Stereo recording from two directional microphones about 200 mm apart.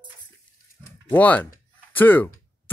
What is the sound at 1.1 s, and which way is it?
Speech, 10° left (ahead or behind).